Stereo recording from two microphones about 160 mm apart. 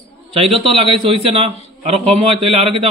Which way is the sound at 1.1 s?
40° right (ahead or behind).